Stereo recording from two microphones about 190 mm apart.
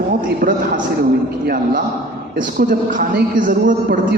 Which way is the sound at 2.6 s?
45° right (ahead or behind).